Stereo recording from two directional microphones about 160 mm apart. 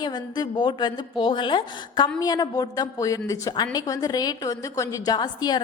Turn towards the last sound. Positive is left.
turn(degrees=25)  # may be behind; listen again after turning